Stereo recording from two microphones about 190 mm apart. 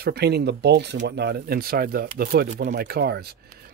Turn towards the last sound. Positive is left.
turn(degrees=-55)  # may be behind; listen again after turning